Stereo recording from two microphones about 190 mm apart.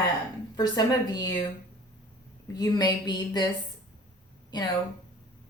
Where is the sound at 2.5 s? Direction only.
20° left (ahead or behind).